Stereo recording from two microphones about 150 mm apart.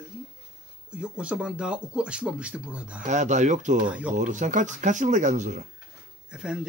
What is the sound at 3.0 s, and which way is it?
Speech, 55° right (ahead or behind).